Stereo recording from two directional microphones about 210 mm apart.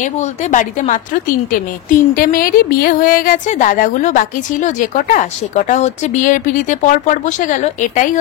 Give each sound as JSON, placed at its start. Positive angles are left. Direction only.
{"t": 0.0, "sound": "speech", "side_deg": 35}